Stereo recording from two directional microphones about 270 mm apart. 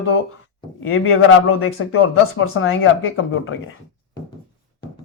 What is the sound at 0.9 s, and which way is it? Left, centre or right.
Speech, left.